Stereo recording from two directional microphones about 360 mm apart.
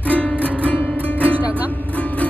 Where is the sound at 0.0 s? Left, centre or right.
Centre.